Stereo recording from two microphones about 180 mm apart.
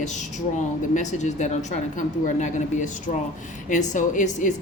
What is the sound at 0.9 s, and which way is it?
A woman's voice, 40° left (ahead or behind).